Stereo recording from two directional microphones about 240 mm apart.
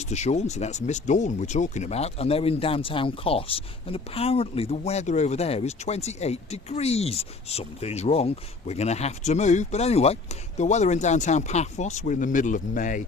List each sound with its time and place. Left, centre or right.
0.0 s speech: left